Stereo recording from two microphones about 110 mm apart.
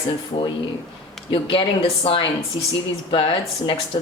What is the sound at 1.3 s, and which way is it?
Speech, 55° left (ahead or behind).